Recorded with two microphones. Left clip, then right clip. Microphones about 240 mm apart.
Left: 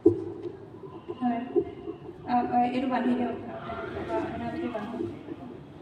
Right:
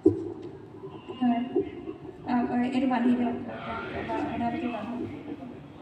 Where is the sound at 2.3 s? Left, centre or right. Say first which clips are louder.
Left 4 dB; right.